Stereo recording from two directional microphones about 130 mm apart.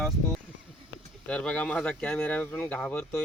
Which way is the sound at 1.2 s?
5° left (ahead or behind).